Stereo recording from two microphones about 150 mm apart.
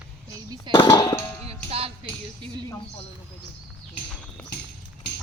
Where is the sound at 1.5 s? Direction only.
40° right (ahead or behind).